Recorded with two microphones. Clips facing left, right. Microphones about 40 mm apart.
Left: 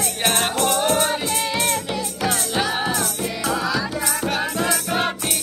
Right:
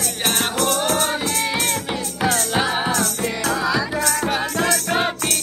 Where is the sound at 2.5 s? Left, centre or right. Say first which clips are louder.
Right 2 dB; centre.